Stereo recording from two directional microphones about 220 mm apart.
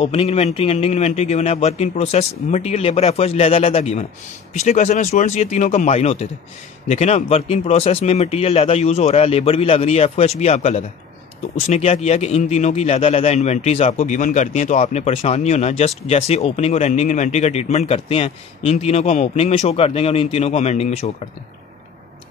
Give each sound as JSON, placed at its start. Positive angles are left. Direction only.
{"t": 0.0, "sound": "a man's voice", "side_deg": 25}